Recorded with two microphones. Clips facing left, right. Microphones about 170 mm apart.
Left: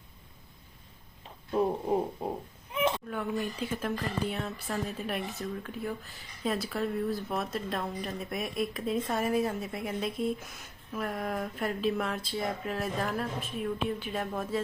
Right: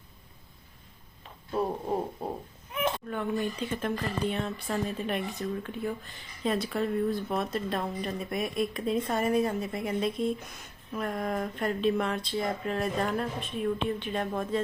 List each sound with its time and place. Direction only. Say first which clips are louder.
3.1 s speech: right 2 dB; 5° left (ahead or behind)